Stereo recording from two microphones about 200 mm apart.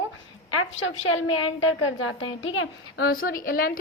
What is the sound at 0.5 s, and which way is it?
A woman's voice, 80° left.